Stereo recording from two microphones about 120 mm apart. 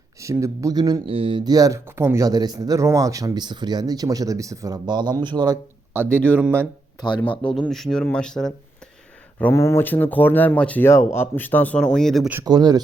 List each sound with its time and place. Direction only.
0.2 s speech: 25° right (ahead or behind)
1.0 s speech: 50° right (ahead or behind)
6.1 s speech: 10° left (ahead or behind)
6.3 s speech: 15° right (ahead or behind)
7.3 s speech: 10° left (ahead or behind)
9.4 s speech: 20° left (ahead or behind); by 12.3 s 5° left (ahead or behind)
12.5 s speech: 35° right (ahead or behind)